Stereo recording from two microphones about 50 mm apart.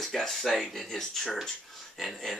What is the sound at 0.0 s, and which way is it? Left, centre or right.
Speech, centre.